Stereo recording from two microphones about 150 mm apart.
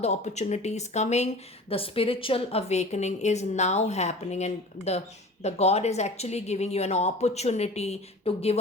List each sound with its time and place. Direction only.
0.0 s a woman's voice: 50° left (ahead or behind)
1.7 s a woman's voice: 40° left (ahead or behind)